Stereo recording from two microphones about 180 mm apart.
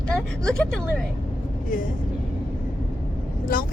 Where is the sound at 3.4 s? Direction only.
50° left (ahead or behind).